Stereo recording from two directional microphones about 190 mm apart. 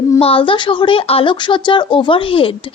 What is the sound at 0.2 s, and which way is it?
A woman's voice, 30° left (ahead or behind).